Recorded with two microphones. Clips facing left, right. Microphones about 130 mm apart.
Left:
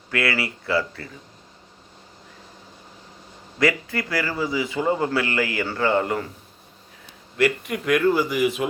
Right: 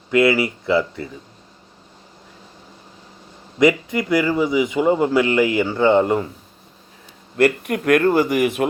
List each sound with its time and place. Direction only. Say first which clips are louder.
0.1 s a man's voice: right 9 dB; 20° right (ahead or behind)
3.6 s a man's voice: right 6 dB; 20° right (ahead or behind)
7.3 s a man's voice: right 5 dB; 50° right (ahead or behind)